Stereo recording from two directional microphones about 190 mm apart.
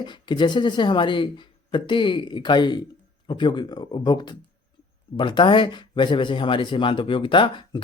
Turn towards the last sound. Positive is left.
turn(degrees=25)  # may be behind; listen again after turning